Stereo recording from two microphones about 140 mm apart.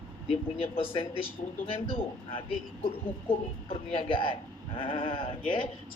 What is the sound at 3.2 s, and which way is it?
Speech, 40° left (ahead or behind).